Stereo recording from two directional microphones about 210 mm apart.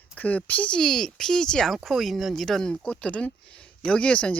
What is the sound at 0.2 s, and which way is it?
Speech, 5° left (ahead or behind).